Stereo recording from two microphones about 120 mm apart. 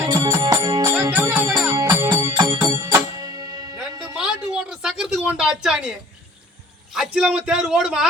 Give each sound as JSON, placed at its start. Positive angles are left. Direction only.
{"t": 0.1, "sound": "music", "side_deg": -25}
{"t": 1.1, "sound": "music", "side_deg": -20}
{"t": 3.8, "sound": "music", "side_deg": -5}
{"t": 6.9, "sound": "a man's voice", "side_deg": -5}